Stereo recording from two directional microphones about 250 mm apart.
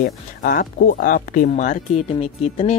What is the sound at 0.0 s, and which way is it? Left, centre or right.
Speech, left.